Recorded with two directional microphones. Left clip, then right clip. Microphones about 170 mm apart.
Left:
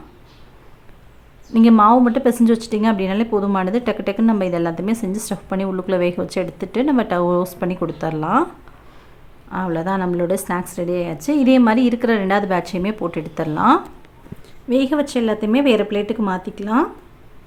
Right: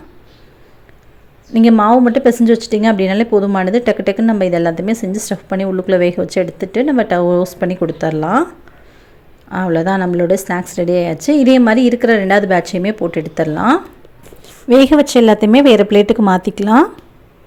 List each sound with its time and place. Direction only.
1.8 s speech: 15° right (ahead or behind)
9.5 s speech: 25° right (ahead or behind)
14.4 s speech: 45° right (ahead or behind)